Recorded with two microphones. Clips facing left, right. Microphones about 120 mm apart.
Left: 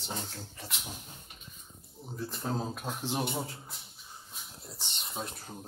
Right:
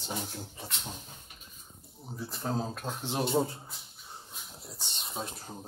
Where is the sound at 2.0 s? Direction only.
10° right (ahead or behind).